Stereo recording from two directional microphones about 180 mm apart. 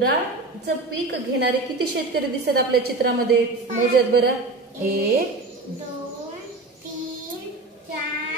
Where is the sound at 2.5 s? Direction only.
60° right (ahead or behind).